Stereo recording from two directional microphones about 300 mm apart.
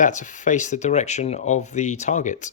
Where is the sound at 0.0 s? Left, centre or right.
Left.